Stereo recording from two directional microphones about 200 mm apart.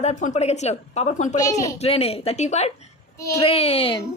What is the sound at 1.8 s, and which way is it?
A woman's voice, 30° left (ahead or behind).